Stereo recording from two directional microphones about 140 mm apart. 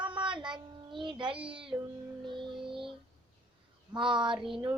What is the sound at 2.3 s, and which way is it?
Music, 35° right (ahead or behind).